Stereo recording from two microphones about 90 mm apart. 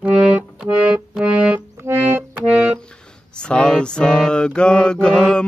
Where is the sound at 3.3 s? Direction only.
10° left (ahead or behind).